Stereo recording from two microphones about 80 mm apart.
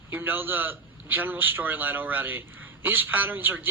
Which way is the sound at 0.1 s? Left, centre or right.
Right.